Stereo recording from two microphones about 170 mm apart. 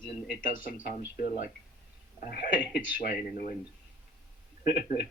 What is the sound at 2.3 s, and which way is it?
A man's voice, 60° left (ahead or behind).